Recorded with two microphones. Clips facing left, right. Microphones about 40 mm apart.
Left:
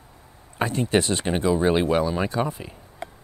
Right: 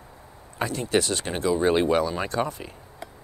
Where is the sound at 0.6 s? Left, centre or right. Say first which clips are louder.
Left 2 dB; left.